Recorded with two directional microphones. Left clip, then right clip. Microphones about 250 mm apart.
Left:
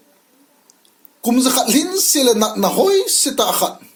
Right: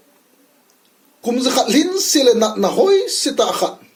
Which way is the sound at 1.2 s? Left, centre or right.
Left.